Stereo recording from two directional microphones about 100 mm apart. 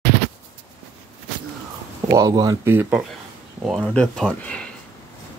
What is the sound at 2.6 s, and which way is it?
Speech, 20° right (ahead or behind).